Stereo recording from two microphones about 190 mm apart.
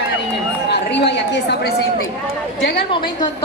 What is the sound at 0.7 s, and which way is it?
A woman's voice, 65° left (ahead or behind).